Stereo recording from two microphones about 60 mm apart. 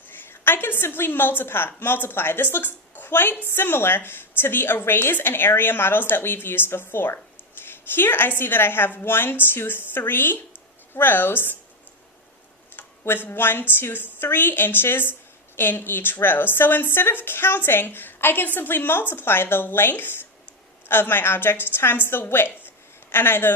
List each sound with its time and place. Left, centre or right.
0.3 s a woman's voice: left
12.7 s a woman's voice: left